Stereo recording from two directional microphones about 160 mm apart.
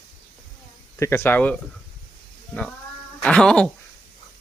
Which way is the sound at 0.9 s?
15° left (ahead or behind).